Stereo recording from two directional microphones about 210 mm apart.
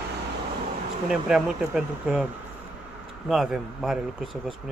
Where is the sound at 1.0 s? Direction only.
Centre (ahead or behind).